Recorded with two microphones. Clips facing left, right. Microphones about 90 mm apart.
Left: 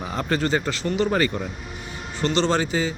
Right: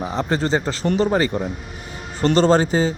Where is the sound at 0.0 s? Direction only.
20° right (ahead or behind).